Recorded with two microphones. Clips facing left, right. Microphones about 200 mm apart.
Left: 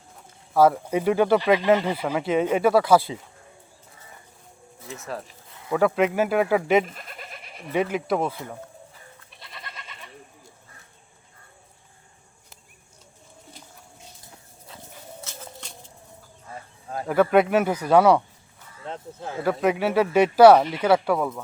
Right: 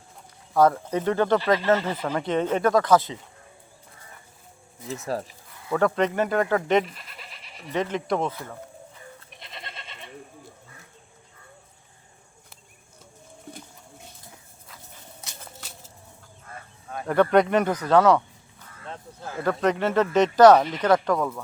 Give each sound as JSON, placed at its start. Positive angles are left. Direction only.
{"t": 0.5, "sound": "speech", "side_deg": 5}
{"t": 5.1, "sound": "speech", "side_deg": -35}
{"t": 5.6, "sound": "speech", "side_deg": 10}
{"t": 6.8, "sound": "goat", "side_deg": 50}
{"t": 7.7, "sound": "speech", "side_deg": 10}
{"t": 9.3, "sound": "goat", "side_deg": -20}
{"t": 15.2, "sound": "a sound", "side_deg": -10}
{"t": 17.1, "sound": "speech", "side_deg": 5}
{"t": 19.4, "sound": "speech", "side_deg": 10}